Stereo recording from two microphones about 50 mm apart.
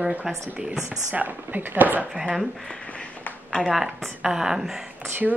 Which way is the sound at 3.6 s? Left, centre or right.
Centre.